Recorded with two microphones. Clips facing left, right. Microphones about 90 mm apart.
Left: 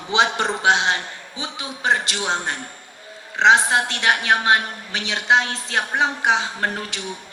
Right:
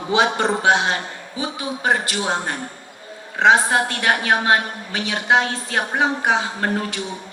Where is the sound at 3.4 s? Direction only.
20° left (ahead or behind).